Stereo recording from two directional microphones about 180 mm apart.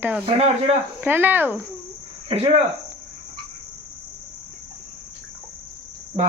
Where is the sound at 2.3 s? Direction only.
30° right (ahead or behind).